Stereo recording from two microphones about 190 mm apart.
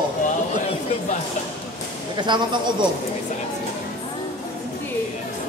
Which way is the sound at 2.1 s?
25° right (ahead or behind).